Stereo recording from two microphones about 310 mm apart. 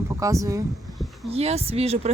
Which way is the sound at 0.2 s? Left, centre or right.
Centre.